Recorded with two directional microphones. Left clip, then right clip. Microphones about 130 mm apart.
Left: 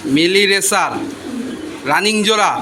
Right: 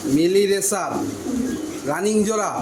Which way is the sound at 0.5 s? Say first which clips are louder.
Left 7 dB; 25° left (ahead or behind).